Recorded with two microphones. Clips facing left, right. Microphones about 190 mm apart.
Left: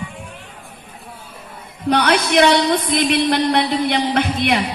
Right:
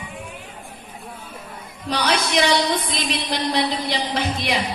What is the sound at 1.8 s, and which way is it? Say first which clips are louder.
A woman's voice: left 6 dB; 60° left (ahead or behind).